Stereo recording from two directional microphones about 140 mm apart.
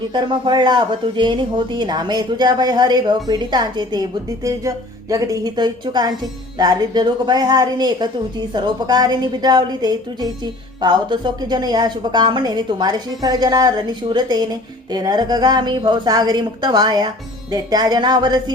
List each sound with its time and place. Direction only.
0.1 s a woman's voice: 35° right (ahead or behind)